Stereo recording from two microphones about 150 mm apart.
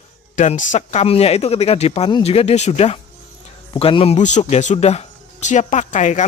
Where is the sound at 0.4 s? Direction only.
55° left (ahead or behind).